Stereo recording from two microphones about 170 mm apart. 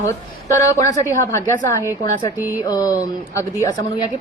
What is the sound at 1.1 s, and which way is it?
Speech, 15° left (ahead or behind).